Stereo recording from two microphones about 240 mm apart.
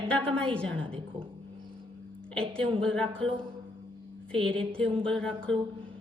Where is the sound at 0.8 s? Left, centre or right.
Right.